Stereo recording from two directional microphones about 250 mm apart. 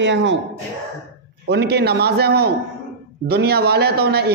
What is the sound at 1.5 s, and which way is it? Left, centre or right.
A man's voice, right.